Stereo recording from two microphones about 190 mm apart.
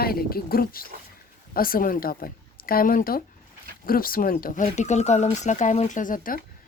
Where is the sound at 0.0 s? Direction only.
50° left (ahead or behind).